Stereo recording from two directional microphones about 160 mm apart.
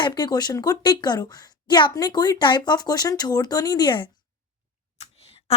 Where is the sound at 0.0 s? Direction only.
25° left (ahead or behind).